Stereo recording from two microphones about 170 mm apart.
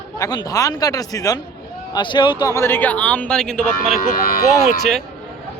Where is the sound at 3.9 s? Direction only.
55° left (ahead or behind).